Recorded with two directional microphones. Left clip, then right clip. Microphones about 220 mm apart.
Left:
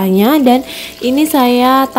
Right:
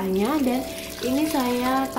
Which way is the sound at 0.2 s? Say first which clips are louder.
Left 16 dB; 50° left (ahead or behind).